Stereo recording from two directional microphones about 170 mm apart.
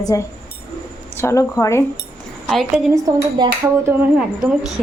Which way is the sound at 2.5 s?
Centre (ahead or behind).